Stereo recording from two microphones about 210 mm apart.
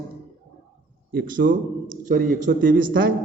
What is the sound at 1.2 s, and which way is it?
A man's voice, 50° right (ahead or behind).